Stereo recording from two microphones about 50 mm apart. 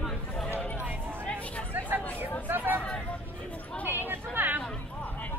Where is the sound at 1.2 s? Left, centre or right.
Left.